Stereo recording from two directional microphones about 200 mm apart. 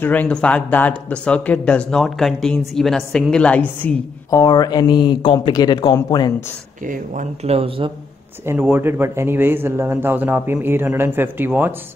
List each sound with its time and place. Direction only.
0.0 s speech: 10° left (ahead or behind)
4.4 s speech: 20° left (ahead or behind)
6.9 s speech: 35° right (ahead or behind)
8.5 s speech: 10° right (ahead or behind)